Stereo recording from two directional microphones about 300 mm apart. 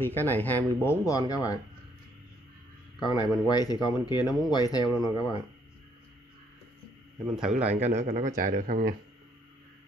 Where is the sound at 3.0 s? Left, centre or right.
Centre.